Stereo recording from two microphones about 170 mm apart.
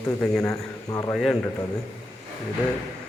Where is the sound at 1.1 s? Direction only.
5° left (ahead or behind).